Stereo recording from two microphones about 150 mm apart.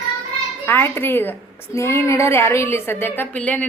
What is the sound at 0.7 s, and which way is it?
A woman's voice, 15° left (ahead or behind).